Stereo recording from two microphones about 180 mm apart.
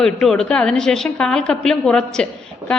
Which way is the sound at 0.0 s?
5° left (ahead or behind).